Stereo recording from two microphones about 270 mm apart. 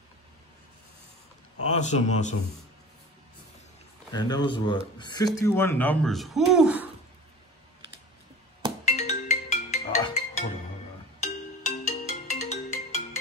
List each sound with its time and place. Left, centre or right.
1.6 s speech: left
4.1 s speech: centre
8.8 s music: left